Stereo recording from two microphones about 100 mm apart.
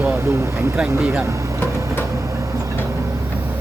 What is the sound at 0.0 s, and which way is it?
Speech, 25° right (ahead or behind).